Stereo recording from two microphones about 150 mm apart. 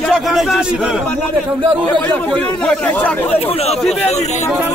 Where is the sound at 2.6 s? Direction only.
10° left (ahead or behind).